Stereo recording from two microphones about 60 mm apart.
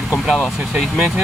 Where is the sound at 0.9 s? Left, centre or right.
Right.